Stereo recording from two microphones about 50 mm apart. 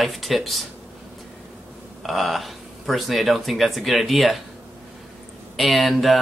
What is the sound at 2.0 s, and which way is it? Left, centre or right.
Speech, centre.